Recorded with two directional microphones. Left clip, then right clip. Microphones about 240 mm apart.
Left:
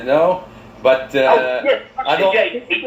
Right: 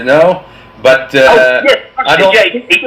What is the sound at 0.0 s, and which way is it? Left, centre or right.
A man's voice, right.